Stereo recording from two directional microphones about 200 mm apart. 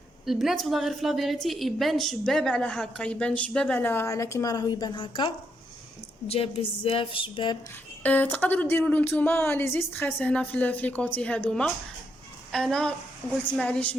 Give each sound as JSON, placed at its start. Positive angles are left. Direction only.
{"t": 0.3, "sound": "a woman's voice", "side_deg": 0}
{"t": 8.0, "sound": "a woman's voice", "side_deg": 10}